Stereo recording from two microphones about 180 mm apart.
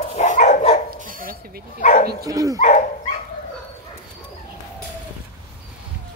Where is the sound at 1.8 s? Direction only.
45° left (ahead or behind).